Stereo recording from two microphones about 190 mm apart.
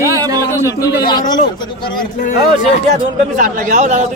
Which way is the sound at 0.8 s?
20° left (ahead or behind).